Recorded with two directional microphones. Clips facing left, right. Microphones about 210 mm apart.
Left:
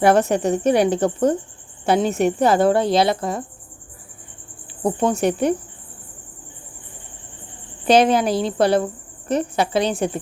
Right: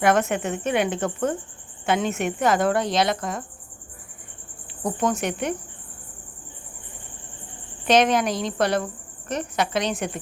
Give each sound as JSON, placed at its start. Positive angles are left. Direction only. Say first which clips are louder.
{"t": 0.0, "sound": "speech", "louder": "left 5 dB", "side_deg": 35}
{"t": 4.8, "sound": "speech", "louder": "left 5 dB", "side_deg": 30}
{"t": 7.9, "sound": "speech", "louder": "left 4 dB", "side_deg": 30}